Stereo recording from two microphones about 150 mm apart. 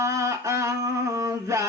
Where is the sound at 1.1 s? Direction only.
20° right (ahead or behind).